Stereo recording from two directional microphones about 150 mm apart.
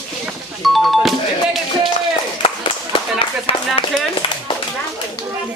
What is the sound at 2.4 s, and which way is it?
Clapping, 35° left (ahead or behind).